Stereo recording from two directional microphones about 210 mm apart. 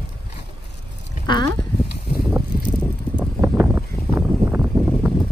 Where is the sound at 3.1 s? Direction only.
10° right (ahead or behind).